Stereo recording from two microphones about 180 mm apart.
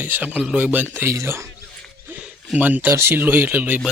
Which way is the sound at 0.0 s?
10° right (ahead or behind).